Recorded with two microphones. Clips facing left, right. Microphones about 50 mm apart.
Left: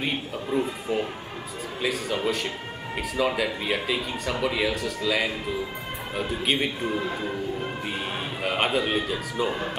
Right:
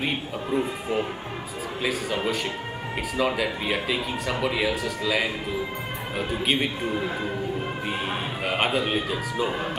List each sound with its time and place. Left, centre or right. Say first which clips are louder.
0.0 s speech: right 1 dB; centre
8.5 s speech: even; centre